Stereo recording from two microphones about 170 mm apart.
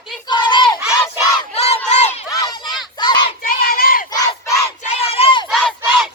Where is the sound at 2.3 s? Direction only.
20° left (ahead or behind).